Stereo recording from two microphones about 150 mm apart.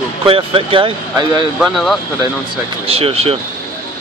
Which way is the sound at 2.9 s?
40° right (ahead or behind).